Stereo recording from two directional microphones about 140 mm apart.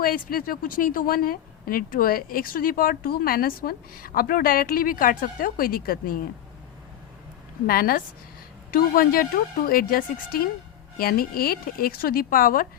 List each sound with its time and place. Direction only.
0.0 s a woman's voice: 90° left
7.7 s a woman's voice: 90° left